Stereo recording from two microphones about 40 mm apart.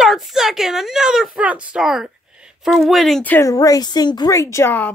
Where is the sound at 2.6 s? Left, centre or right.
Centre.